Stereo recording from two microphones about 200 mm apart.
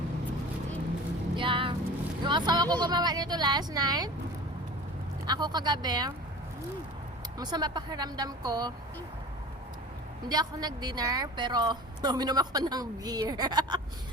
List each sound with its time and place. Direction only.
1.4 s vehicle: 25° right (ahead or behind)
2.2 s a woman's voice: 20° right (ahead or behind)
5.2 s a woman's voice: 20° right (ahead or behind)
7.3 s a woman's voice: 20° right (ahead or behind)
10.2 s a woman's voice: 20° right (ahead or behind)